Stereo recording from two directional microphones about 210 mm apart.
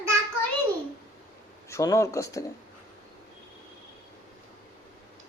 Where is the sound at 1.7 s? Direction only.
15° left (ahead or behind).